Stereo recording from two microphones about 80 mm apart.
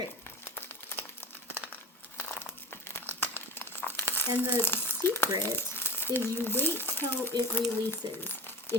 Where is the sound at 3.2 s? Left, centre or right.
Left.